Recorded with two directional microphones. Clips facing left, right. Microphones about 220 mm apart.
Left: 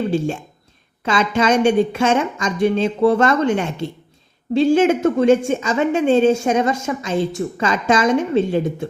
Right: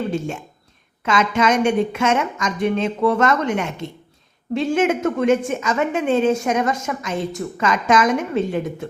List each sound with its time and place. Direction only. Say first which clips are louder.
0.1 s a woman's voice: left 4 dB; 30° left (ahead or behind)